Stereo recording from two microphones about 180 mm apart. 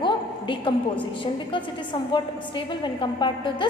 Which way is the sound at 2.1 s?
25° left (ahead or behind).